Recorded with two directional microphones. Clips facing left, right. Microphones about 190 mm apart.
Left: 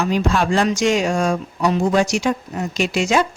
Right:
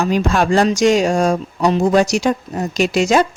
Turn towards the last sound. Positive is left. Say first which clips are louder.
# right 4 dB
turn(degrees=-40)  # may be behind; listen again after turning